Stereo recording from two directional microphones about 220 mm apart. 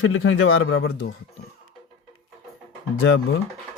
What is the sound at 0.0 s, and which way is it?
Speech, 65° left (ahead or behind).